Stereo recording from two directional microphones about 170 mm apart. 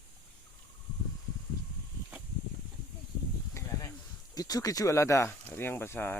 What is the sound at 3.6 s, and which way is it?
Snake, 20° left (ahead or behind).